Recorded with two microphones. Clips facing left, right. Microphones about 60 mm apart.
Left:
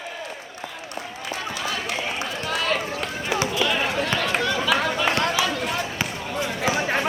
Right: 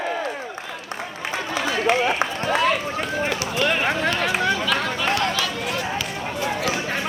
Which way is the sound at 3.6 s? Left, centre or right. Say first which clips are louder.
Right 6 dB; right.